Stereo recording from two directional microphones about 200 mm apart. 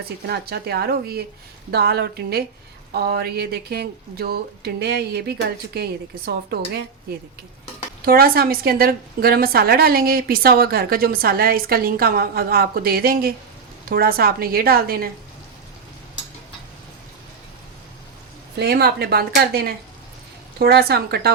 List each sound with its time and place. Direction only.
0.0 s a woman's voice: 50° right (ahead or behind)
8.0 s a woman's voice: 50° right (ahead or behind)
18.5 s a woman's voice: 55° right (ahead or behind)